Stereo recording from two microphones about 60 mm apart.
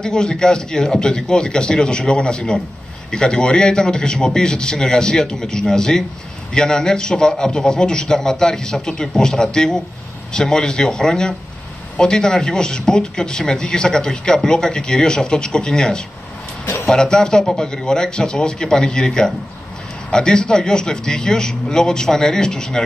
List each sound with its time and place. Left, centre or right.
0.0 s a man's voice: centre
1.1 s a man's voice: centre